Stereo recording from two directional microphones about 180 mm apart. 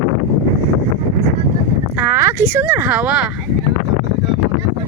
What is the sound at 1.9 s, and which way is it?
Speech, 10° right (ahead or behind).